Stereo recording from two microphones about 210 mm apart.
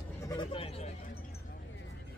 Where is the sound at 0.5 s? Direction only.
30° left (ahead or behind).